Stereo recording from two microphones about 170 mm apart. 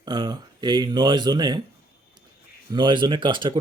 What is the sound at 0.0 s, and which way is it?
Speech, 25° right (ahead or behind).